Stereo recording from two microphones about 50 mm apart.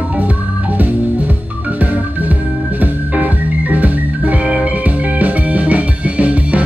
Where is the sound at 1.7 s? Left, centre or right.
Right.